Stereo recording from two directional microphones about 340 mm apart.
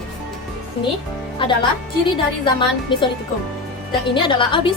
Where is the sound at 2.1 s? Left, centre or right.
Centre.